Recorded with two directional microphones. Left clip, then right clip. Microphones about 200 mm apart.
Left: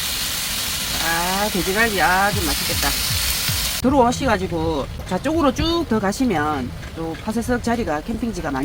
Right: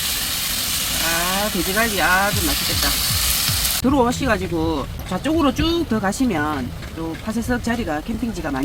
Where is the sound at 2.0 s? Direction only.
40° left (ahead or behind).